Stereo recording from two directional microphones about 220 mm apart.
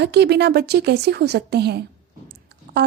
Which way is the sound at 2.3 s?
50° right (ahead or behind).